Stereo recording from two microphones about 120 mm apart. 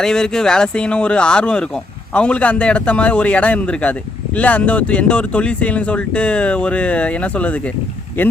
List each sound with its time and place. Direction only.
0.0 s speech: 5° left (ahead or behind)